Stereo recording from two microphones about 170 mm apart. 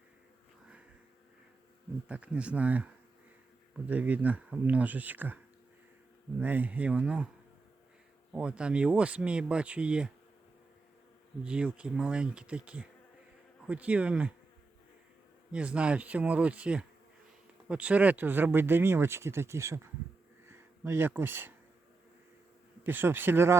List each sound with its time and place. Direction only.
2.0 s speech: 5° right (ahead or behind)
6.4 s speech: 10° right (ahead or behind)
8.3 s speech: 5° right (ahead or behind)
11.4 s speech: 5° right (ahead or behind)
15.5 s speech: 5° right (ahead or behind)
22.8 s speech: 10° right (ahead or behind)